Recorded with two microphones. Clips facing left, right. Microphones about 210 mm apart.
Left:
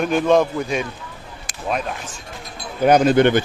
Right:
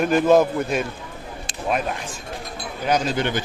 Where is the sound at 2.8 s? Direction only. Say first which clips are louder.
Left 9 dB; 55° left (ahead or behind).